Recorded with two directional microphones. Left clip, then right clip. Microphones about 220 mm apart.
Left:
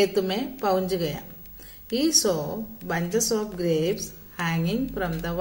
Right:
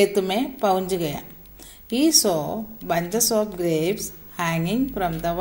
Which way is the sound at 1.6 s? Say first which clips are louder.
Right 4 dB; 15° right (ahead or behind).